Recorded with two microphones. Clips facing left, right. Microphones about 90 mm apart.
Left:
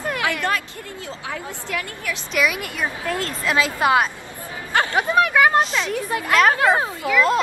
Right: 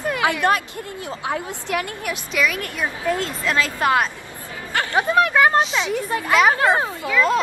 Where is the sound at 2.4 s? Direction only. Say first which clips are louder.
Left 1 dB; 5° left (ahead or behind).